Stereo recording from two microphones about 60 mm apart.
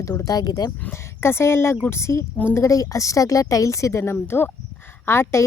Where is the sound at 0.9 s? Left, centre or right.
Left.